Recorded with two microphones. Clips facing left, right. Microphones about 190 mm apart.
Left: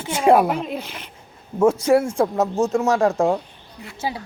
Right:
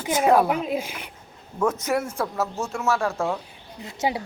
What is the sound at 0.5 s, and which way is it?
Speech, 5° right (ahead or behind).